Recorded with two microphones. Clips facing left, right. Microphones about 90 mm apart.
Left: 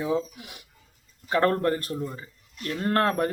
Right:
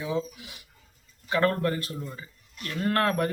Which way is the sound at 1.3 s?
40° left (ahead or behind).